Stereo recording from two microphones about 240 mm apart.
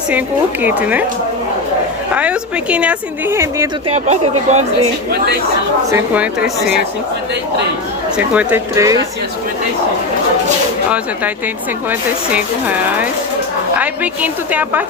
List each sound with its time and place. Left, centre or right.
0.1 s speech: centre
2.1 s a woman's voice: centre
3.8 s speech: right
5.9 s a woman's voice: centre
8.3 s speech: centre
11.9 s speech: centre